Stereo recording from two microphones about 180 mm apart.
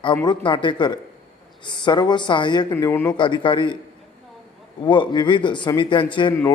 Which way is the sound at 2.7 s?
15° left (ahead or behind).